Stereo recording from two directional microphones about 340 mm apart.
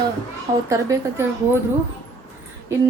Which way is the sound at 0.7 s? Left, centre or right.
Centre.